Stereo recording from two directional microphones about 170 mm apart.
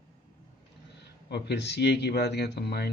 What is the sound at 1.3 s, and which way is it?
Speech, 80° left.